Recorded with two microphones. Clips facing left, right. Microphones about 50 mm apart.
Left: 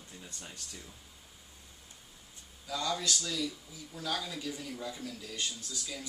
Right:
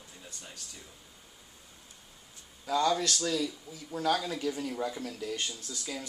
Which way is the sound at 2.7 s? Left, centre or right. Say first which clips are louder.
Right 6 dB; right.